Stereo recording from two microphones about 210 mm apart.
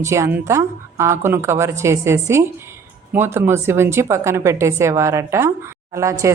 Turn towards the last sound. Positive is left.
turn(degrees=-15)  # may be behind; listen again after turning